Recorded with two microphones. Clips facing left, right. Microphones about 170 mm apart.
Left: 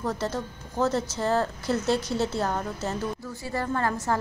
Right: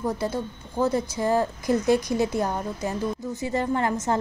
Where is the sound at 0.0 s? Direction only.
10° right (ahead or behind).